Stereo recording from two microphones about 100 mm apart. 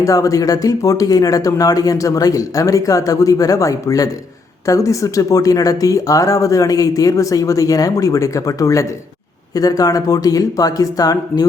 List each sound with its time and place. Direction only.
0.0 s speech: 35° left (ahead or behind)